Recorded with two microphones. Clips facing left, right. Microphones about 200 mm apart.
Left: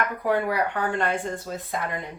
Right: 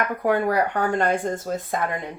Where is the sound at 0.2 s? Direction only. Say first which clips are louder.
Right 4 dB; 45° right (ahead or behind).